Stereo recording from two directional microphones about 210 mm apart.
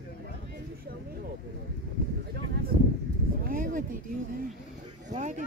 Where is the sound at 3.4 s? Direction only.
40° right (ahead or behind).